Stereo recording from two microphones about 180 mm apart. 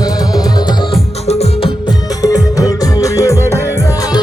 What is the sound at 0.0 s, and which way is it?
Music, 20° left (ahead or behind).